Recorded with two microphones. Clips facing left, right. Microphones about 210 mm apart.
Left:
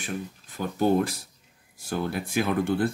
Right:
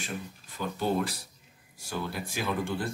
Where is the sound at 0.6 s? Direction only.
50° left (ahead or behind).